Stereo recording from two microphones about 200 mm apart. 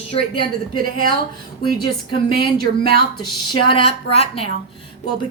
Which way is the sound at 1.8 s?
25° left (ahead or behind).